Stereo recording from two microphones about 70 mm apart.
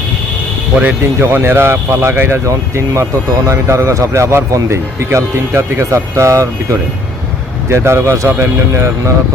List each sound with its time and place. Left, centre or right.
1.2 s speech: right